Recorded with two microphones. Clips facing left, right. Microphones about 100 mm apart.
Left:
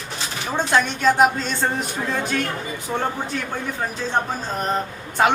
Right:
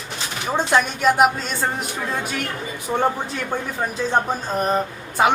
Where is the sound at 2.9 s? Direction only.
15° right (ahead or behind).